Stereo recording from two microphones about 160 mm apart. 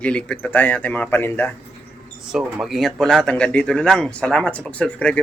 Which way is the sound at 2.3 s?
5° right (ahead or behind).